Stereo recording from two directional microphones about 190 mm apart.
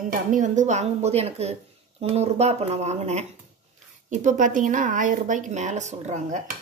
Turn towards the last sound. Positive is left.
turn(degrees=-35)  # may be behind; listen again after turning